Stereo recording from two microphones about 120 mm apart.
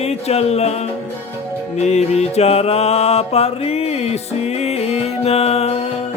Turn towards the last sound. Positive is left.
turn(degrees=60)  # may be behind; listen again after turning